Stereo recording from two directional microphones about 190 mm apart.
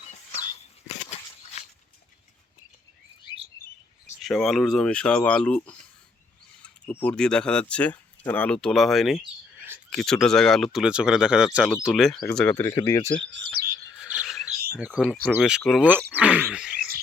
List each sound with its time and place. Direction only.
1.5 s a sound: 35° left (ahead or behind)
4.2 s speech: centre (ahead or behind)
6.9 s speech: 5° left (ahead or behind)
13.3 s bird: 60° right (ahead or behind)
13.9 s chirp: 5° right (ahead or behind)
14.8 s speech: 5° right (ahead or behind)
16.1 s a sound: 5° right (ahead or behind)